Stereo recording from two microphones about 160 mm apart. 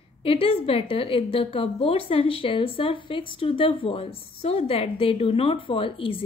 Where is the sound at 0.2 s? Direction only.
35° left (ahead or behind).